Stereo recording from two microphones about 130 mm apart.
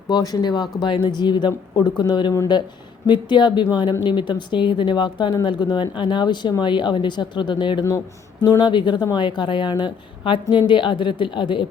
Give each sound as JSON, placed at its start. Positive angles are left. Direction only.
{"t": 0.1, "sound": "speech", "side_deg": 30}